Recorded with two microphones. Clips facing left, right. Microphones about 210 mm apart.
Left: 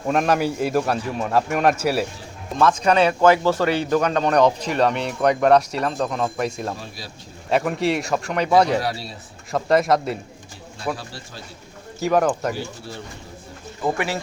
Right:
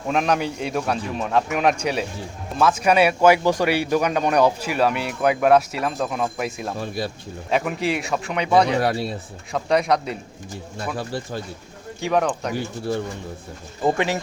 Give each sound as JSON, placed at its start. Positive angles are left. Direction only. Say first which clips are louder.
{"t": 0.1, "sound": "a man's voice", "louder": "left 2 dB", "side_deg": 0}
{"t": 2.6, "sound": "a man's voice", "louder": "even", "side_deg": -5}
{"t": 6.7, "sound": "speech", "louder": "right 10 dB", "side_deg": -55}
{"t": 7.5, "sound": "a man's voice", "louder": "left 2 dB", "side_deg": 0}
{"t": 8.8, "sound": "speech", "louder": "right 5 dB", "side_deg": -55}
{"t": 9.5, "sound": "a man's voice", "louder": "left 2 dB", "side_deg": 0}
{"t": 11.9, "sound": "a man's voice", "louder": "left 2 dB", "side_deg": 0}
{"t": 13.8, "sound": "speech", "louder": "right 3 dB", "side_deg": -20}